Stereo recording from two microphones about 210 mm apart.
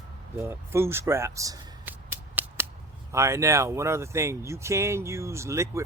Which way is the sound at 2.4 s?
10° right (ahead or behind).